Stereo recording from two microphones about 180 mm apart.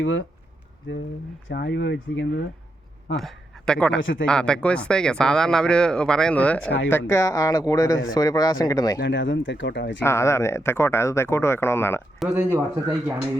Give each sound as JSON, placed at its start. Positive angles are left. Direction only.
{"t": 0.0, "sound": "speech", "side_deg": 90}
{"t": 1.5, "sound": "speech", "side_deg": 70}
{"t": 3.2, "sound": "a man's voice", "side_deg": 0}
{"t": 4.0, "sound": "speech", "side_deg": 90}
{"t": 4.3, "sound": "speech", "side_deg": 5}
{"t": 6.7, "sound": "speech", "side_deg": 80}
{"t": 6.9, "sound": "speech", "side_deg": 15}
{"t": 9.0, "sound": "speech", "side_deg": 90}
{"t": 10.0, "sound": "speech", "side_deg": 15}
{"t": 12.2, "sound": "speech", "side_deg": -10}